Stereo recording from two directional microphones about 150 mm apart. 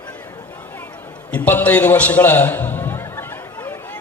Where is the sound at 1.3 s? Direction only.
10° left (ahead or behind).